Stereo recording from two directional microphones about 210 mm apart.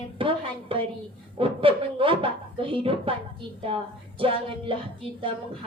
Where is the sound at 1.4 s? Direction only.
25° right (ahead or behind).